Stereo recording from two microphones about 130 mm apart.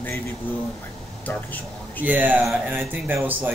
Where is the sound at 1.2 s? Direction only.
15° left (ahead or behind).